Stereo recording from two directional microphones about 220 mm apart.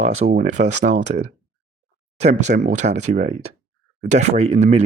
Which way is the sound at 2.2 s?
30° right (ahead or behind).